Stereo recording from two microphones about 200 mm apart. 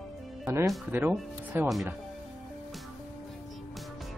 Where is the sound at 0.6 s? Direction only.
5° right (ahead or behind).